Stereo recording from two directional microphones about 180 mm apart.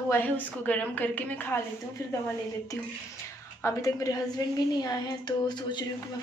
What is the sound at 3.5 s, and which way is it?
A woman's voice, 15° left (ahead or behind).